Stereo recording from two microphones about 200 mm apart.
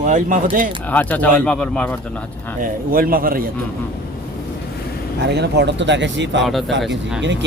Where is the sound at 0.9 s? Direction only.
10° left (ahead or behind).